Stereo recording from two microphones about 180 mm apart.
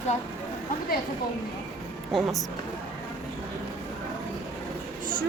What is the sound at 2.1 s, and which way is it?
Speech, centre (ahead or behind).